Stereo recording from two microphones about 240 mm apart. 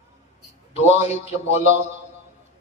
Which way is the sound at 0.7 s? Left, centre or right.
Left.